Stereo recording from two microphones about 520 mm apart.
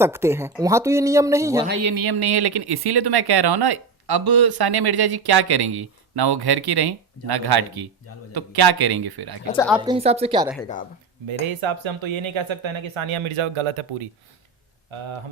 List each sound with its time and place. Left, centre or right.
0.0 s speech: centre
1.8 s speech: right
9.5 s a woman's voice: centre
10.6 s speech: centre
11.4 s speech: right